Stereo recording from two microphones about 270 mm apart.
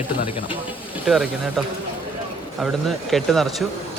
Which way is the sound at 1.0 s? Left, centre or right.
Centre.